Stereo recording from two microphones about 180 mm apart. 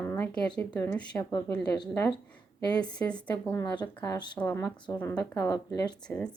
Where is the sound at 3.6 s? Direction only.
20° left (ahead or behind).